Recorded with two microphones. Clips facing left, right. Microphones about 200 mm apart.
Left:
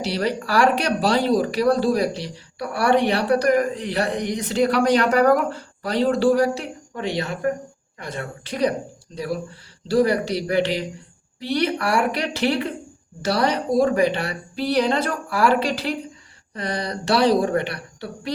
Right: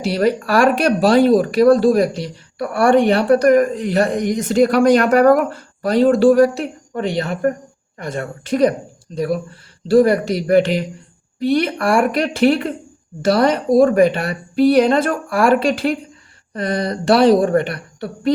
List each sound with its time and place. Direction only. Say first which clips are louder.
0.0 s speech: right 7 dB; 50° right (ahead or behind)